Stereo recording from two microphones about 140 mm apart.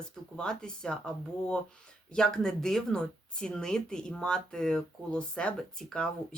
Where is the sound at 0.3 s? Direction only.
5° left (ahead or behind).